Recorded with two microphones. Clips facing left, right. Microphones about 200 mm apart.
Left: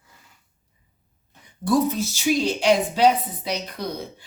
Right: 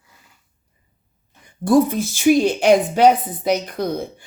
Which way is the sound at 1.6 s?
50° right (ahead or behind).